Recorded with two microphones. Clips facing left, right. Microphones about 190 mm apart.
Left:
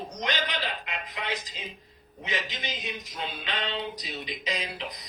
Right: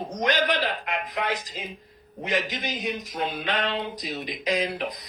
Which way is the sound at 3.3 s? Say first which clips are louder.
Right 4 dB; 60° right (ahead or behind).